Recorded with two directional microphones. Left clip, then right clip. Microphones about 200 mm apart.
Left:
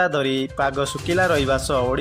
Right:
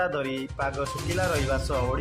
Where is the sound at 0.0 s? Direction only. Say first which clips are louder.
Left 7 dB; 25° left (ahead or behind).